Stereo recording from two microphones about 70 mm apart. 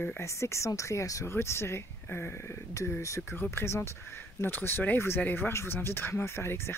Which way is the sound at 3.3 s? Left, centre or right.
Left.